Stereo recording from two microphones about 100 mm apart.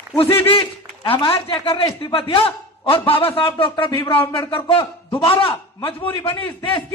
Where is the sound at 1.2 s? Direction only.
60° left (ahead or behind).